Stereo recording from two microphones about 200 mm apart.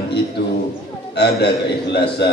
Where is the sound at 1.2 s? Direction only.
55° left (ahead or behind).